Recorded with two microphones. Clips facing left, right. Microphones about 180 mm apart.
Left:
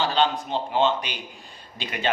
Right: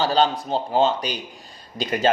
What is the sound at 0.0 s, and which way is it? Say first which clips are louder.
Speech: right 3 dB; 40° right (ahead or behind).